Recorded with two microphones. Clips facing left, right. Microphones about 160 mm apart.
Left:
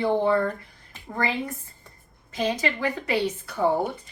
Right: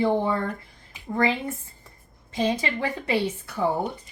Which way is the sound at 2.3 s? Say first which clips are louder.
Right 1 dB; 25° right (ahead or behind).